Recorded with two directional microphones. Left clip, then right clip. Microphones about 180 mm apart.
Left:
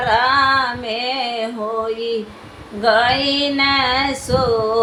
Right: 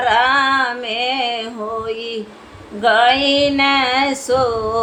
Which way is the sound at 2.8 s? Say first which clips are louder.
Right 2 dB; 15° right (ahead or behind).